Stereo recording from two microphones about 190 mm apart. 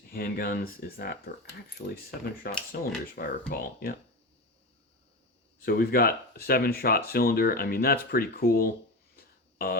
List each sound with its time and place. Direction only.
0.1 s speech: 50° left (ahead or behind)
5.5 s speech: 50° left (ahead or behind)
9.1 s a sound: 55° left (ahead or behind)